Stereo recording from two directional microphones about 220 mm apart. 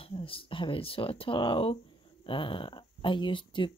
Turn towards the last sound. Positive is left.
turn(degrees=20)  # may be behind; listen again after turning